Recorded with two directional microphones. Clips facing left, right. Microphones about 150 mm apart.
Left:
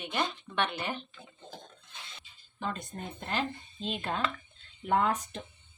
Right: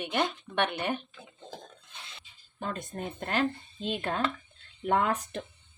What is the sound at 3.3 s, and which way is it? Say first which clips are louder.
Speech: right 4 dB; 55° right (ahead or behind).